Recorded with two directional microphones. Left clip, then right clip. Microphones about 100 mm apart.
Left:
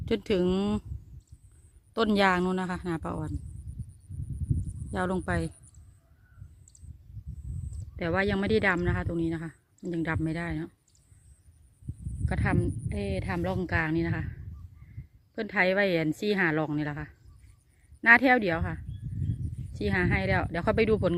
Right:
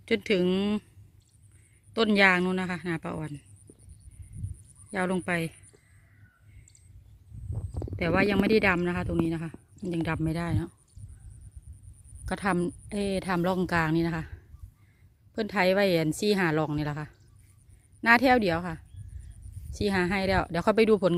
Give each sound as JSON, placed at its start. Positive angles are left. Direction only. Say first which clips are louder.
{"t": 0.0, "sound": "a woman's voice", "louder": "right 1 dB", "side_deg": 15}
{"t": 1.9, "sound": "a woman's voice", "louder": "right 3 dB", "side_deg": 15}
{"t": 4.9, "sound": "speech", "louder": "right 2 dB", "side_deg": 5}
{"t": 7.9, "sound": "speech", "louder": "right 3 dB", "side_deg": -15}
{"t": 10.2, "sound": "a woman's voice", "louder": "right 1 dB", "side_deg": -25}
{"t": 12.2, "sound": "a woman's voice", "louder": "right 2 dB", "side_deg": -35}
{"t": 15.4, "sound": "a woman's voice", "louder": "right 1 dB", "side_deg": -20}
{"t": 19.7, "sound": "a woman's voice", "louder": "right 1 dB", "side_deg": -25}